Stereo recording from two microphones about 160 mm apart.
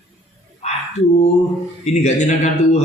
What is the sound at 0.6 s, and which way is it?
Frog, 40° left (ahead or behind).